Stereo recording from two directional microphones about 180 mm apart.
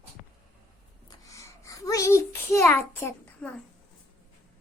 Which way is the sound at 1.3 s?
20° left (ahead or behind).